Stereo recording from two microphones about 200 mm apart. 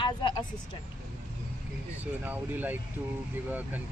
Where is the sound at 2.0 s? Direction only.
10° right (ahead or behind).